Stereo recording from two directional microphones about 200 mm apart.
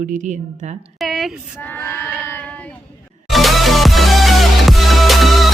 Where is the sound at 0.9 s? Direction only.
Centre (ahead or behind).